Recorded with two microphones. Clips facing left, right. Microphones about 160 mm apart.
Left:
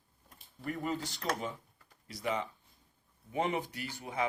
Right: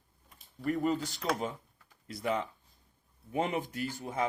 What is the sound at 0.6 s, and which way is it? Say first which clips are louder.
Speech: right 6 dB; 45° right (ahead or behind).